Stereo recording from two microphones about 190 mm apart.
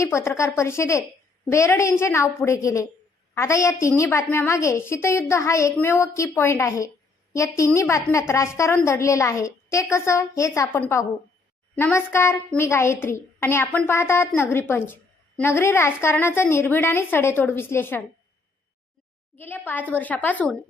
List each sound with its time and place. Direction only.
0.0 s a woman's voice: 15° left (ahead or behind)
19.4 s a woman's voice: 10° left (ahead or behind)